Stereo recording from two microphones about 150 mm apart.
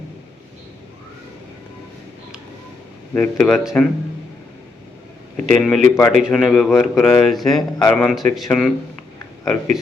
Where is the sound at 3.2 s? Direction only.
5° left (ahead or behind).